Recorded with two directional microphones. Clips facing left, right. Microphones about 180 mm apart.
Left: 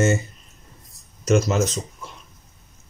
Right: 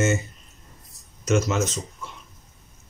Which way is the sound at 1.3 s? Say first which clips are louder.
Left 3 dB; 35° left (ahead or behind).